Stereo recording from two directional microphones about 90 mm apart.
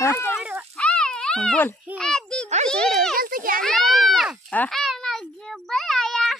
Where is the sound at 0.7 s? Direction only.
10° left (ahead or behind).